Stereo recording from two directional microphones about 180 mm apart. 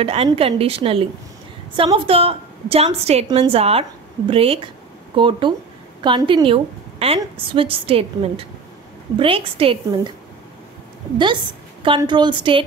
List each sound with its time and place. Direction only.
0.0 s a woman's voice: 35° right (ahead or behind)
11.8 s a woman's voice: 25° right (ahead or behind)